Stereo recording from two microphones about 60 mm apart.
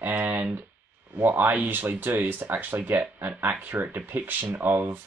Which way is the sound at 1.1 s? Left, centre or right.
Right.